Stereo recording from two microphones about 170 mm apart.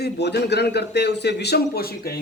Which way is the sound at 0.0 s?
75° left (ahead or behind).